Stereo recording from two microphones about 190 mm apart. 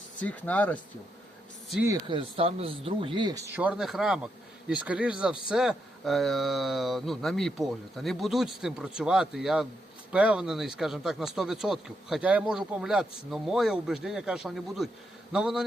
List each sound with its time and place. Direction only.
0.2 s speech: 5° left (ahead or behind)
1.9 s speech: 25° right (ahead or behind); by 15.6 s 5° right (ahead or behind)